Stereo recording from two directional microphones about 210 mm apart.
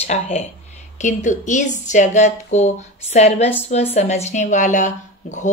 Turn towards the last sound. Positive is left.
turn(degrees=35)  # may be behind; listen again after turning